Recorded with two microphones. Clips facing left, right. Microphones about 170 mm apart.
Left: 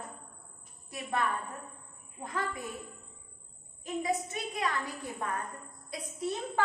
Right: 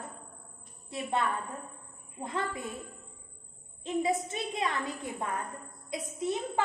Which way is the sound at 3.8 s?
25° right (ahead or behind).